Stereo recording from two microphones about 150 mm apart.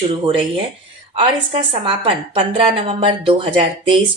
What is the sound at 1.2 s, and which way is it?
A woman's voice, 35° right (ahead or behind).